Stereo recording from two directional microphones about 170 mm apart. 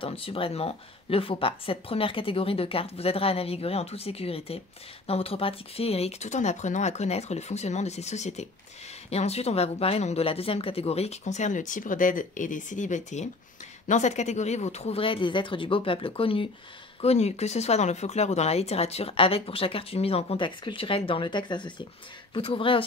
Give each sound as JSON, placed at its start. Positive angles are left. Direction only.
{"t": 0.0, "sound": "speech", "side_deg": 30}